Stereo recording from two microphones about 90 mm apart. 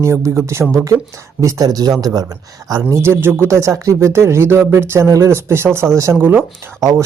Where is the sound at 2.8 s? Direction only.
30° right (ahead or behind).